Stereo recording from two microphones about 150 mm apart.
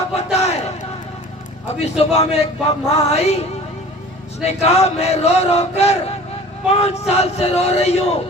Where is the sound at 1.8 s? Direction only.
45° left (ahead or behind).